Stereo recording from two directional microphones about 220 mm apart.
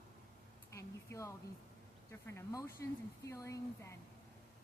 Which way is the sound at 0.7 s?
15° left (ahead or behind).